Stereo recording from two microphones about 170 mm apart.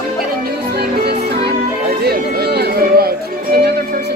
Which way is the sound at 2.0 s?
70° right (ahead or behind).